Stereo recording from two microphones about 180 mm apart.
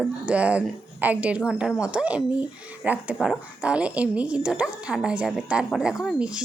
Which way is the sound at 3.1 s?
5° left (ahead or behind).